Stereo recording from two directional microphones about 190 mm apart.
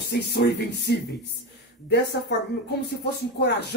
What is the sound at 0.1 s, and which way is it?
Speech, 60° left (ahead or behind).